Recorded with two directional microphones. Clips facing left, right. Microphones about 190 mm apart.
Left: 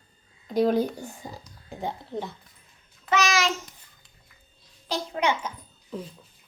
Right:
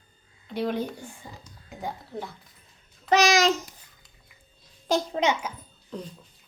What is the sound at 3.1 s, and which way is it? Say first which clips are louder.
Speech: right 4 dB; 35° right (ahead or behind).